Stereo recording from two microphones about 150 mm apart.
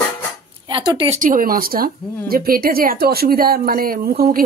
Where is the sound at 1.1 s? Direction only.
60° right (ahead or behind).